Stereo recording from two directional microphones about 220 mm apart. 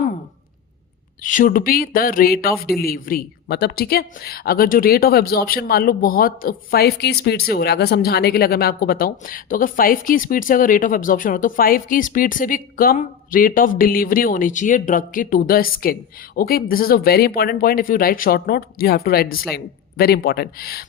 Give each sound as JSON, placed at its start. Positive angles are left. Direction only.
{"t": 1.2, "sound": "speech", "side_deg": 35}